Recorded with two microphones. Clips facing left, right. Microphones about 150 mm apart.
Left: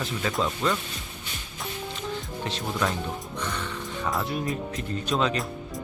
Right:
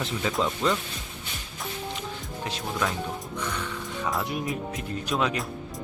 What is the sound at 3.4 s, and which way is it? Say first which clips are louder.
Speech: even; 10° right (ahead or behind).